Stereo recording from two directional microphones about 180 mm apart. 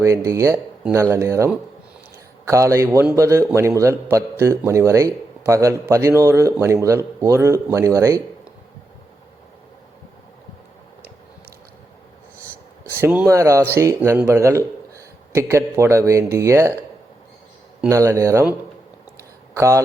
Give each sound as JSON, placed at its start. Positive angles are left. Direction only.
{"t": 0.3, "sound": "a man's voice", "side_deg": -20}
{"t": 13.0, "sound": "a man's voice", "side_deg": -10}
{"t": 17.8, "sound": "a man's voice", "side_deg": -15}
{"t": 19.5, "sound": "speech", "side_deg": -15}